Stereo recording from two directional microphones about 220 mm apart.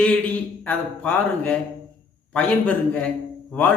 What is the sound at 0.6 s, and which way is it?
Speech, 5° left (ahead or behind).